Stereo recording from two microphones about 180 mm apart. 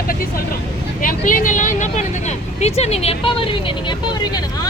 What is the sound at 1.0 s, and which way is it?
A woman's voice, 50° left (ahead or behind).